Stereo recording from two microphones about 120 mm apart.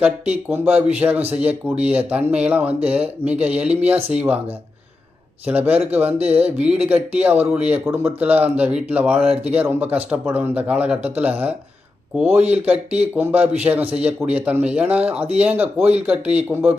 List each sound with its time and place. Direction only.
0.0 s speech: 15° right (ahead or behind)
5.5 s speech: 15° right (ahead or behind)